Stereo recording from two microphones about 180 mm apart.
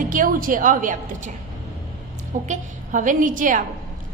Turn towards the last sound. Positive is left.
turn(degrees=-45)  # may be behind; listen again after turning